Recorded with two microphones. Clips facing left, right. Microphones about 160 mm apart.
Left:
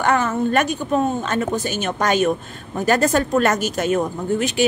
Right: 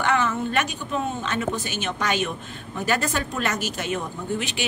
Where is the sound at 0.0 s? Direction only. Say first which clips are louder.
Left 4 dB; 45° left (ahead or behind).